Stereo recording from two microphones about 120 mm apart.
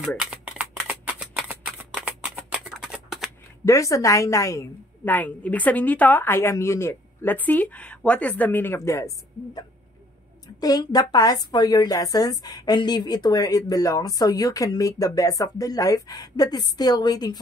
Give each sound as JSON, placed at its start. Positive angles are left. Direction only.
{"t": 0.2, "sound": "shuffling cards", "side_deg": -10}
{"t": 2.0, "sound": "a sound", "side_deg": -10}
{"t": 2.7, "sound": "shuffling cards", "side_deg": -5}
{"t": 3.6, "sound": "a woman's voice", "side_deg": 25}
{"t": 5.0, "sound": "a woman's voice", "side_deg": 15}